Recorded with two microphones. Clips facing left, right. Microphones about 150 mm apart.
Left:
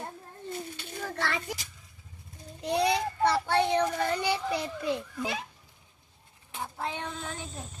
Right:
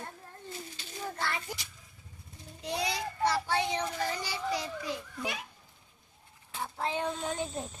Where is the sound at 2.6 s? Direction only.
60° left (ahead or behind).